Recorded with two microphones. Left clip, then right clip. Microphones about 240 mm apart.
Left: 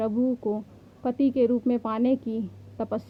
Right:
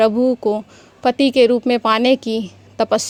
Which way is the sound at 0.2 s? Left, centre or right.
Right.